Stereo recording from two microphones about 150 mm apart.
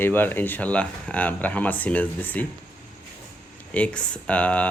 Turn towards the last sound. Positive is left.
turn(degrees=10)  # may be behind; listen again after turning